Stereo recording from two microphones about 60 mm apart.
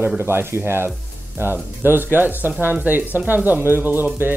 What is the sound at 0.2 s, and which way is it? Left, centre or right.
Speech, right.